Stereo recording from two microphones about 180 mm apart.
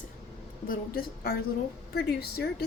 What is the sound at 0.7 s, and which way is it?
A woman's voice, 55° left (ahead or behind).